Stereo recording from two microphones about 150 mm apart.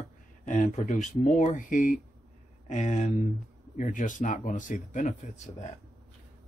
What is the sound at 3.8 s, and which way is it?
Speech, 60° left (ahead or behind).